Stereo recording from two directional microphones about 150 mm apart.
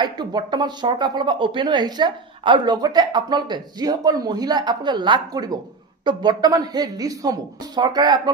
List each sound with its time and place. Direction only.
0.0 s speech: 30° right (ahead or behind)